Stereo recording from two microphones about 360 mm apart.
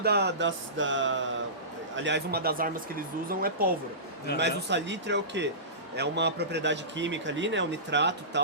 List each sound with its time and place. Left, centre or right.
0.0 s a man's voice: right